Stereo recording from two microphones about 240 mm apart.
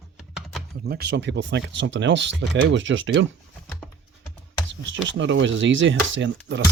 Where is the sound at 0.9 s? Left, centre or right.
Right.